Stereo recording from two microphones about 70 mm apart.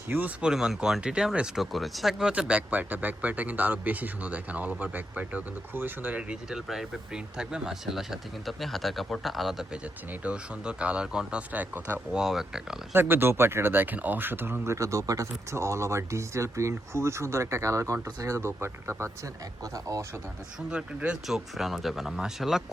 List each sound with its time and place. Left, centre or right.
0.1 s speech: right
0.4 s speech: centre
9.8 s speech: centre
12.1 s speech: centre
12.9 s speech: right
19.6 s speech: right
20.7 s speech: centre
21.2 s speech: centre